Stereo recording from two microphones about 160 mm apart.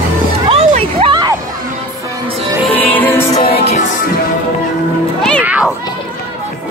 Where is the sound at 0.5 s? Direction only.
40° right (ahead or behind).